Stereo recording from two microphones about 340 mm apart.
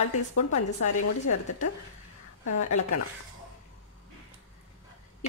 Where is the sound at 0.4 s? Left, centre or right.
Left.